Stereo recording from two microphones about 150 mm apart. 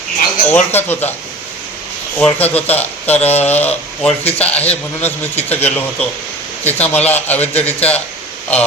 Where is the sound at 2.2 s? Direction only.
10° left (ahead or behind).